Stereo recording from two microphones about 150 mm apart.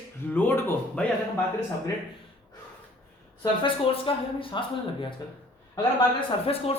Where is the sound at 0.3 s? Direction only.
10° left (ahead or behind).